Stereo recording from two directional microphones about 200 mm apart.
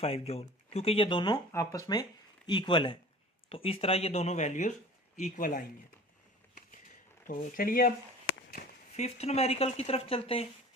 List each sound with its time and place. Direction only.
0.0 s speech: 30° left (ahead or behind)
7.3 s speech: 45° left (ahead or behind)
9.0 s speech: 30° left (ahead or behind)